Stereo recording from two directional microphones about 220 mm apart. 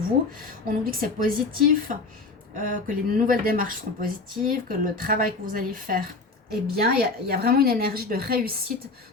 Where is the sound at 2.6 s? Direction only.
40° right (ahead or behind).